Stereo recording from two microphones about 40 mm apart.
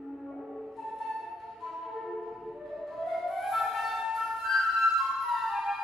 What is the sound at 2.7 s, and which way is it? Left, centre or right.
Flute, centre.